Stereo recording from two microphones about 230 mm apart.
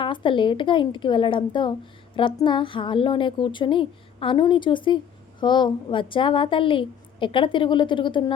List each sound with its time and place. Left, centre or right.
0.0 s a woman's voice: left